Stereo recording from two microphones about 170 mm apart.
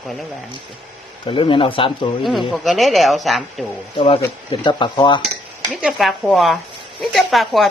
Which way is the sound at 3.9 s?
30° left (ahead or behind).